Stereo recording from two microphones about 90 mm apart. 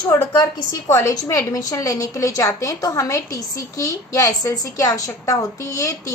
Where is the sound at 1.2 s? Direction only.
40° left (ahead or behind).